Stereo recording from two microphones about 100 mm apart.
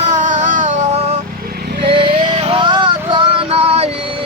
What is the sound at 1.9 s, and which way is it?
Music, 75° right (ahead or behind).